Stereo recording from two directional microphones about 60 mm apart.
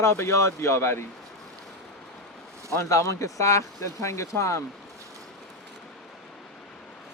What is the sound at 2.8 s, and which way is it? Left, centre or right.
Speech, left.